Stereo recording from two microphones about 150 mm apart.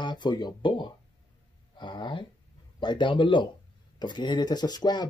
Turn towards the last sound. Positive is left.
turn(degrees=30)  # may be behind; listen again after turning